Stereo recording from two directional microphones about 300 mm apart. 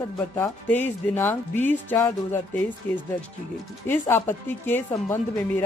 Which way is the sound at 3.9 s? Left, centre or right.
Centre.